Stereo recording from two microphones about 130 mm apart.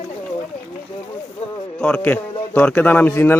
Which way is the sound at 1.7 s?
10° left (ahead or behind).